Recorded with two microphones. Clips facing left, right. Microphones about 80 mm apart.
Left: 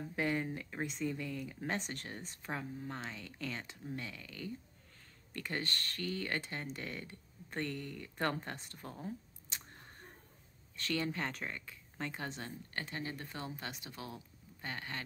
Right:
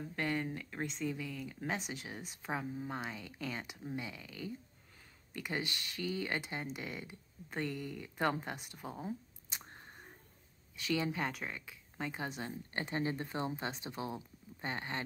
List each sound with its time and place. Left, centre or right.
0.1 s speech: centre
10.8 s a woman's voice: centre